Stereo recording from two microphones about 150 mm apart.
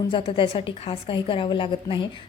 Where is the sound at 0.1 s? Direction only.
35° left (ahead or behind).